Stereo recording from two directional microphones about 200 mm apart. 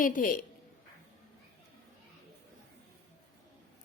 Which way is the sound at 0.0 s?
45° left (ahead or behind).